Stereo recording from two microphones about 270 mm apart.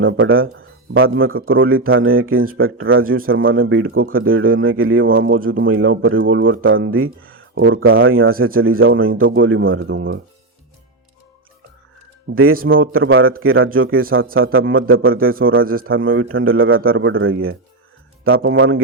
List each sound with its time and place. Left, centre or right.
0.0 s a man's voice: right
3.9 s a man's voice: right
4.2 s a man's voice: right
12.3 s a man's voice: right
15.6 s a man's voice: right
16.0 s a man's voice: right